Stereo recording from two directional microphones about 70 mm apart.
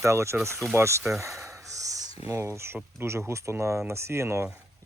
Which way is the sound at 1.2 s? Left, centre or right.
Right.